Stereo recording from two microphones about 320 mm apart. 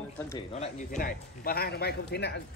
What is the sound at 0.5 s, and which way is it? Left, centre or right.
A man's voice, left.